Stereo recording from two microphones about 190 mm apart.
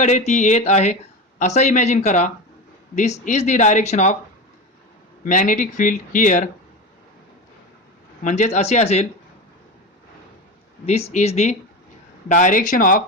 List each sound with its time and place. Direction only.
0.0 s speech: 40° left (ahead or behind)
5.2 s speech: 45° left (ahead or behind)
8.2 s speech: 40° left (ahead or behind)
10.8 s speech: 35° left (ahead or behind)